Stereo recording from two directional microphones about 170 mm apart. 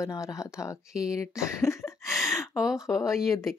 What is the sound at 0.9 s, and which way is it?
Speech, 5° right (ahead or behind).